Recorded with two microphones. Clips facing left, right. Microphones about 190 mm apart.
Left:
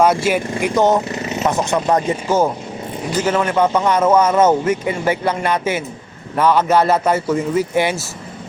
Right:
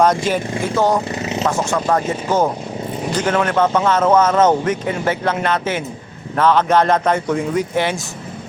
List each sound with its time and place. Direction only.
0.0 s speech: 10° left (ahead or behind)
3.2 s speech: 5° left (ahead or behind)